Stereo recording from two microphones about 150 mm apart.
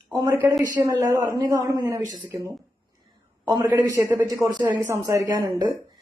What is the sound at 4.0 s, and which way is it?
A woman's voice, 20° right (ahead or behind).